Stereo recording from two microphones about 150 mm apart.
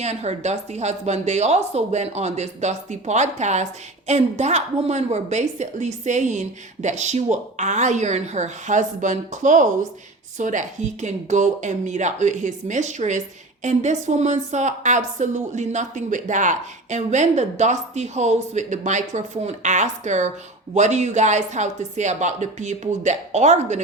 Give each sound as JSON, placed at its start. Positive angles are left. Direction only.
{"t": 0.0, "sound": "a woman's voice", "side_deg": -45}